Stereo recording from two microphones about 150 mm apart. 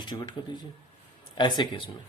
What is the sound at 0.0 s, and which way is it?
Speech, 30° left (ahead or behind).